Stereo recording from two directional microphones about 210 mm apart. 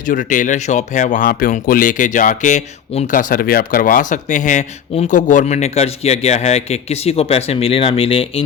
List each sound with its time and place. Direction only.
0.1 s speech: 40° left (ahead or behind)